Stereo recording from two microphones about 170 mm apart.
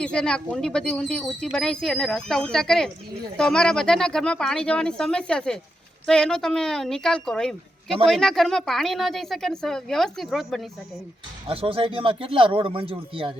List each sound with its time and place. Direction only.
0.0 s speech: 5° left (ahead or behind)
11.4 s speech: 35° right (ahead or behind)